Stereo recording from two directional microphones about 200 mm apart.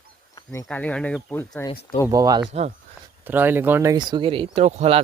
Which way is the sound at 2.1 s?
20° right (ahead or behind).